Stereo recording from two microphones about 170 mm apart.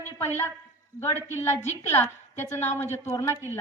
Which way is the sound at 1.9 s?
15° left (ahead or behind).